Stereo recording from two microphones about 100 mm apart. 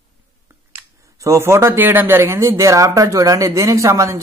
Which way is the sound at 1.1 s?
30° right (ahead or behind).